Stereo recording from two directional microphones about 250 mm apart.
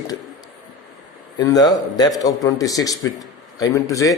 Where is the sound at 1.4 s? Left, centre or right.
Centre.